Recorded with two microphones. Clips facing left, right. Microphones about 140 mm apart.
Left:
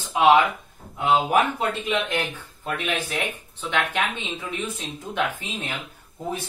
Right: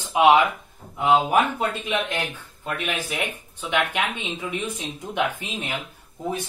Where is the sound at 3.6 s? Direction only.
15° right (ahead or behind).